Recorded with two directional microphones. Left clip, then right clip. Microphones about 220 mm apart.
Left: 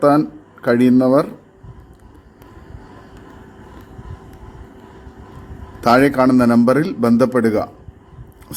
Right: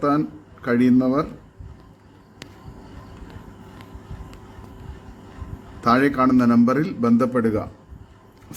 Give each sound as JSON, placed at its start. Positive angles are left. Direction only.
{"t": 0.6, "sound": "a man's voice", "side_deg": 15}
{"t": 5.8, "sound": "a man's voice", "side_deg": 10}